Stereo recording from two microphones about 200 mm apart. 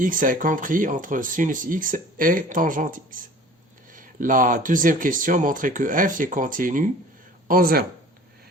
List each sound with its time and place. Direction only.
0.0 s speech: 40° right (ahead or behind)